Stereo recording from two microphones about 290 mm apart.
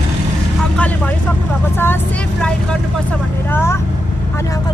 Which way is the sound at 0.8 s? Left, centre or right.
Centre.